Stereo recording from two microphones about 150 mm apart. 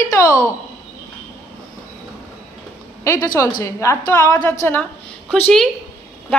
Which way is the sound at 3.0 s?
20° left (ahead or behind).